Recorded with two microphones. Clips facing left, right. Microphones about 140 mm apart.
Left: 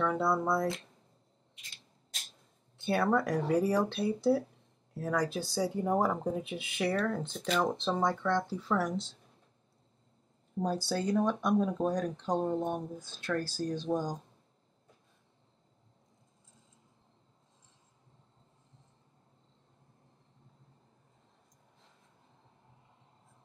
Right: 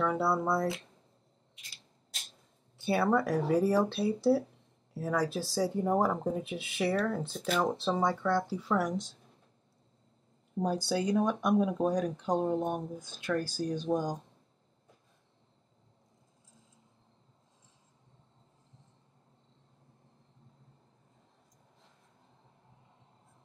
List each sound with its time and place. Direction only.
0.0 s speech: 5° right (ahead or behind)
2.8 s speech: 5° right (ahead or behind)
10.6 s speech: 10° right (ahead or behind)